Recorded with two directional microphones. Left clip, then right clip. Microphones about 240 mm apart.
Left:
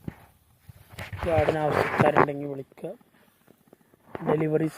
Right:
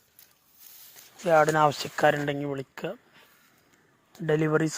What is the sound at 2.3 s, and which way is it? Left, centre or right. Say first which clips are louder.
Speech: right 2 dB; right.